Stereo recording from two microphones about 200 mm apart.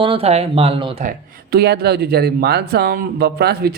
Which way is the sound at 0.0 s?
30° right (ahead or behind).